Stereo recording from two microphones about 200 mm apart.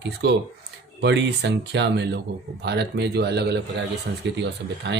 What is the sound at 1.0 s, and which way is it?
Speech, 60° right (ahead or behind).